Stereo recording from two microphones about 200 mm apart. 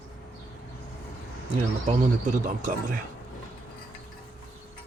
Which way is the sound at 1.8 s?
40° right (ahead or behind).